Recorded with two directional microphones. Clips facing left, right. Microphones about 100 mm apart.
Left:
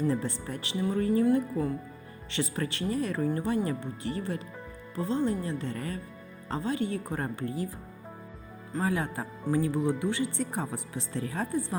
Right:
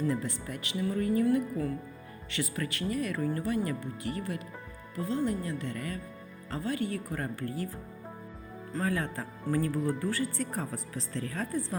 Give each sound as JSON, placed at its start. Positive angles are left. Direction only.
{"t": 0.1, "sound": "speech", "side_deg": 30}
{"t": 8.8, "sound": "speech", "side_deg": 20}